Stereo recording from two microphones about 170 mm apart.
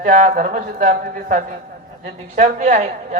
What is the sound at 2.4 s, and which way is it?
Speech, 45° right (ahead or behind).